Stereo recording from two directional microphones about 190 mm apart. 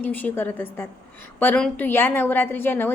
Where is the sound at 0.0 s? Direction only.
10° left (ahead or behind).